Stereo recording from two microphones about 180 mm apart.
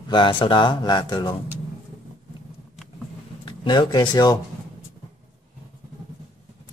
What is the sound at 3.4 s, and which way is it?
Speech, 25° left (ahead or behind).